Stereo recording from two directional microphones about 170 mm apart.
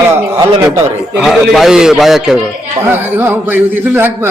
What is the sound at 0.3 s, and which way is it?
Speech, 25° right (ahead or behind).